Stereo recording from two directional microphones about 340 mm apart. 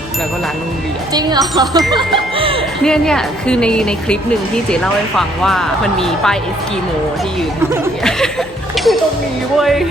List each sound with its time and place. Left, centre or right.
1.1 s speech: centre
2.8 s a woman's voice: centre
7.7 s a woman's voice: centre